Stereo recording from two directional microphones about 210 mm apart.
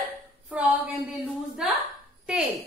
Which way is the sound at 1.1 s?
Centre (ahead or behind).